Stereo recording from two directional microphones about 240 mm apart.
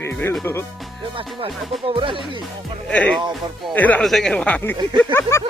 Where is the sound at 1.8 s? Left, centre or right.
Right.